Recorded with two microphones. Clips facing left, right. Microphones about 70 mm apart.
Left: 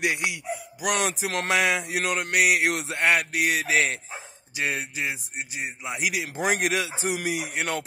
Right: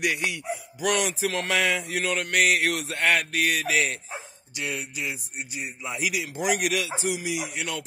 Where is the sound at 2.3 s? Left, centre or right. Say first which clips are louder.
Left 1 dB; centre.